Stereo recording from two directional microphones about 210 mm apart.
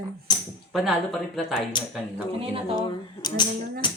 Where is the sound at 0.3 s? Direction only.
20° left (ahead or behind).